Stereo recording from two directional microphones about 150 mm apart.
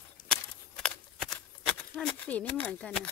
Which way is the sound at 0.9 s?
5° left (ahead or behind).